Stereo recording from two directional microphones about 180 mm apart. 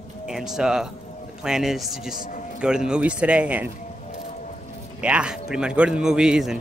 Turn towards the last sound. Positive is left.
turn(degrees=-5)  # may be behind; listen again after turning